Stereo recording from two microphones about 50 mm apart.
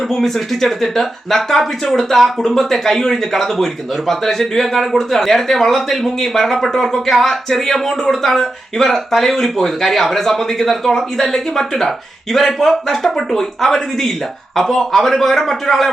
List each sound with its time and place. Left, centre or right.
0.1 s speech: centre